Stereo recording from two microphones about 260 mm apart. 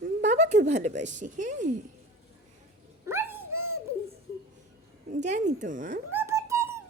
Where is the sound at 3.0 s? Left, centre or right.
Centre.